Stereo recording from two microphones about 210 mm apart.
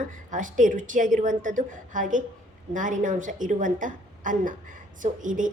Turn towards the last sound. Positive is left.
turn(degrees=-40)  # may be behind; listen again after turning